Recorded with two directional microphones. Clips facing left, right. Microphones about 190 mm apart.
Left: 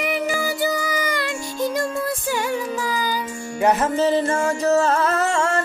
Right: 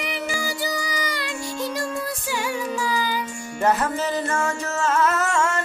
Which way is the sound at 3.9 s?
30° left (ahead or behind).